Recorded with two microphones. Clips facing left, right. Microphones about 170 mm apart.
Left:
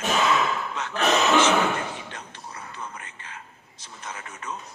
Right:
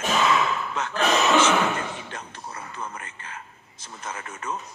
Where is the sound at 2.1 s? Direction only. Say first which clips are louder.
Right 3 dB; 50° right (ahead or behind).